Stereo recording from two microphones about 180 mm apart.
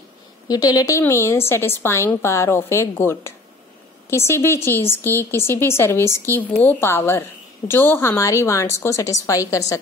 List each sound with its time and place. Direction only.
0.5 s speech: 20° left (ahead or behind)